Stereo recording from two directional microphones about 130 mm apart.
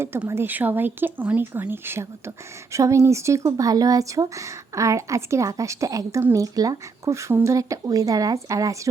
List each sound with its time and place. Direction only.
0.0 s speech: 20° right (ahead or behind)